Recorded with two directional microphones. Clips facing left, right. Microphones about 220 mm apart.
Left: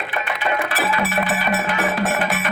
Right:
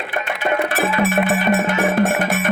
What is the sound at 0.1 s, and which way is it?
Music, 45° right (ahead or behind).